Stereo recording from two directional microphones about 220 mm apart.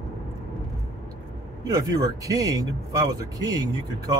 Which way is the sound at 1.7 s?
15° right (ahead or behind).